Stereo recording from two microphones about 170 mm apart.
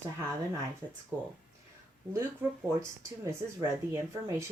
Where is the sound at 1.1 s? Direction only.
20° right (ahead or behind).